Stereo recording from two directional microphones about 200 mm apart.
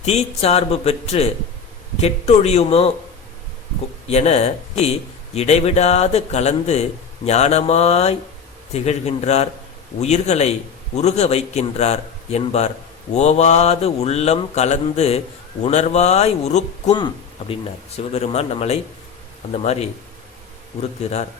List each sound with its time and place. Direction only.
0.0 s a man's voice: 30° left (ahead or behind)
4.1 s a man's voice: 30° left (ahead or behind)
21.0 s a man's voice: 35° left (ahead or behind)